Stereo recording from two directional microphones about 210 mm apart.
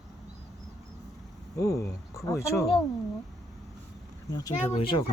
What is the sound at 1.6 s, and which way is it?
Speech, 15° left (ahead or behind).